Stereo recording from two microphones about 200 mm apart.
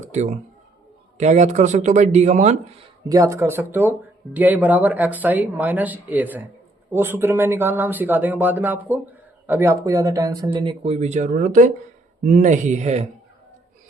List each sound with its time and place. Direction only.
0.1 s speech: 35° right (ahead or behind)
3.0 s speech: 15° right (ahead or behind); by 13.1 s 35° right (ahead or behind)